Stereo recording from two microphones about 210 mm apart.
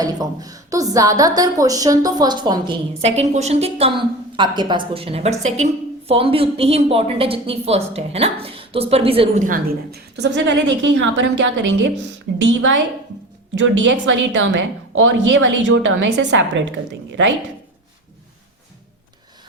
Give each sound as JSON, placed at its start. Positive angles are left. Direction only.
{"t": 0.0, "sound": "a woman's voice", "side_deg": -20}